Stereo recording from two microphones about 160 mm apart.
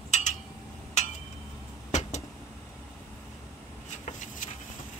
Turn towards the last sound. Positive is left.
turn(degrees=50)  # may be behind; listen again after turning